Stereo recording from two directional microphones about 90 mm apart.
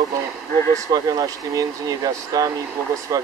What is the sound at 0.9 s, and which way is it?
Speech, 45° right (ahead or behind).